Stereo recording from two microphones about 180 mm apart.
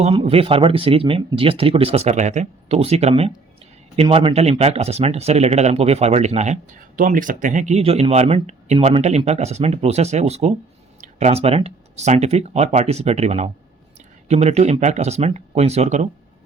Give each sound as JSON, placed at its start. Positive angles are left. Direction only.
{"t": 0.0, "sound": "speech", "side_deg": -35}